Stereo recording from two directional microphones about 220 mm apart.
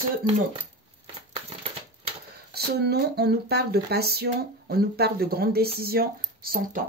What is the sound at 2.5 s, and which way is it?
Speech, 45° right (ahead or behind).